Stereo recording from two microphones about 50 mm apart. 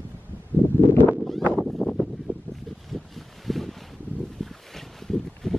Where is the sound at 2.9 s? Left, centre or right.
Centre.